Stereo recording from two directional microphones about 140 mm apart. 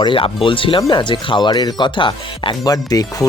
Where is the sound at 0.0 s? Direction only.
35° left (ahead or behind).